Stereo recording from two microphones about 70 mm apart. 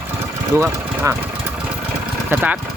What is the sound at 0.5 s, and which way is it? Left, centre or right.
Speech, right.